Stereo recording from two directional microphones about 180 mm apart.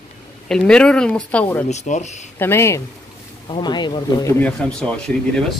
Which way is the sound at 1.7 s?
40° left (ahead or behind).